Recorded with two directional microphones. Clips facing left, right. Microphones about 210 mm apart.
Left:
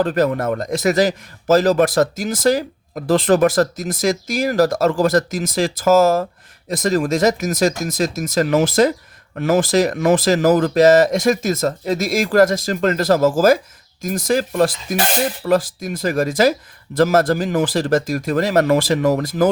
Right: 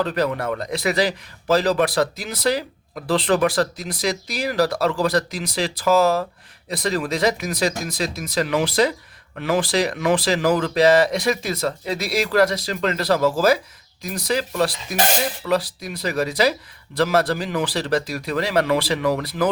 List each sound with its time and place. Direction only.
0.0 s speech: 50° left (ahead or behind)